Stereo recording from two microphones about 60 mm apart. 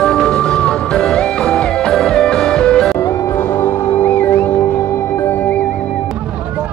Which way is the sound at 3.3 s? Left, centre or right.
Left.